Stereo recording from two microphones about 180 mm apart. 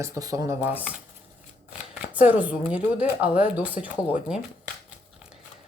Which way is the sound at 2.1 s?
10° right (ahead or behind).